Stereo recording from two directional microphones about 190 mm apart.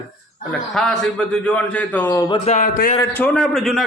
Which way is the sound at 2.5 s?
50° left (ahead or behind).